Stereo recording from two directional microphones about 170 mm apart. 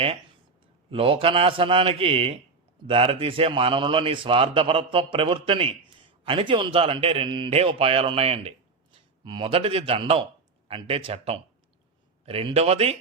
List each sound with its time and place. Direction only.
0.9 s a man's voice: 35° right (ahead or behind)